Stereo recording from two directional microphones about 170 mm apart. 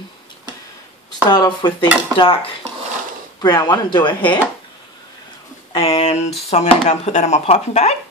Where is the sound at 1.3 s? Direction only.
25° left (ahead or behind).